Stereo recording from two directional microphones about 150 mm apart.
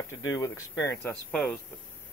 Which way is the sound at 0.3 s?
20° left (ahead or behind).